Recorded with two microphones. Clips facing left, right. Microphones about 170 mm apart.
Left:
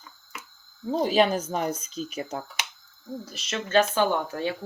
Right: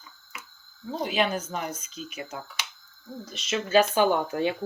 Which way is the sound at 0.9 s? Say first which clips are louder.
Left 5 dB; 35° left (ahead or behind).